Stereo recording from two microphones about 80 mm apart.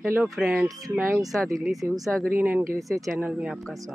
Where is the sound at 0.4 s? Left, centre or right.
Centre.